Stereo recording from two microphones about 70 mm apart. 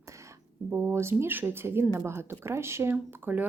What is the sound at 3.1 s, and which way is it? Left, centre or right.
Speech, right.